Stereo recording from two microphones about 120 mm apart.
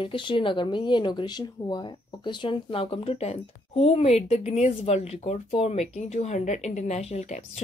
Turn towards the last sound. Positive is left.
turn(degrees=65)  # may be behind; listen again after turning